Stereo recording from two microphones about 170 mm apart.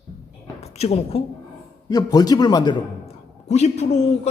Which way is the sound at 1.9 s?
20° left (ahead or behind).